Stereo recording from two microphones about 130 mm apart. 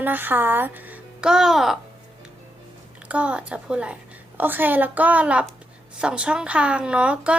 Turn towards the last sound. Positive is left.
turn(degrees=-10)  # may be behind; listen again after turning